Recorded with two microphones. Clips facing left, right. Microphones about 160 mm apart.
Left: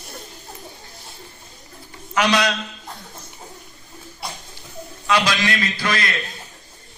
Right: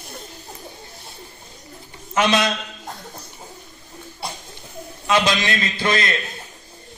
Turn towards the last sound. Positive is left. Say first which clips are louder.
# right 2 dB
turn(degrees=-20)  # may be behind; listen again after turning